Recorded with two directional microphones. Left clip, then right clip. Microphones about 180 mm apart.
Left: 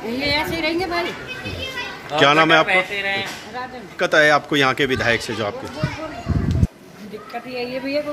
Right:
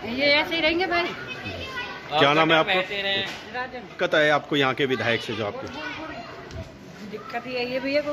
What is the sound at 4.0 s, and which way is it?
A man's voice, 10° left (ahead or behind).